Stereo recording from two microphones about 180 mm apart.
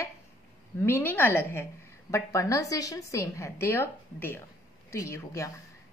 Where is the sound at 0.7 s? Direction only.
15° left (ahead or behind).